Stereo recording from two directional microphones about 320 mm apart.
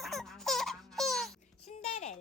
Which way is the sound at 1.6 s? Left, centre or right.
Centre.